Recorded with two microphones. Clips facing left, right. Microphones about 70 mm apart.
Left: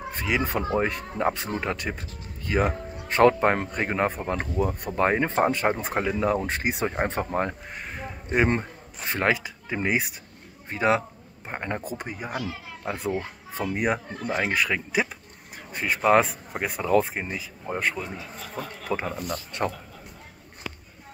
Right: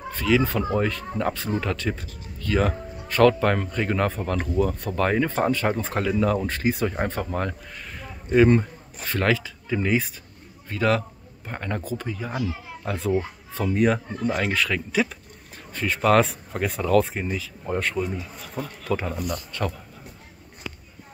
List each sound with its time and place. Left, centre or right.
0.1 s speech: left
12.9 s speech: centre
18.9 s speech: centre
19.3 s speech: left